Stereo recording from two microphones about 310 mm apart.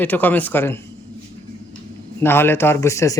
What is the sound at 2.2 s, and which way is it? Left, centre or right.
Speech, centre.